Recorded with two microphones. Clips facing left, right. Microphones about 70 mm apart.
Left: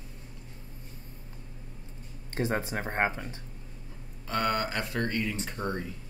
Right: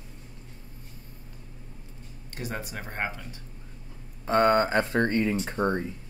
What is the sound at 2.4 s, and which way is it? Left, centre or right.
Speech, left.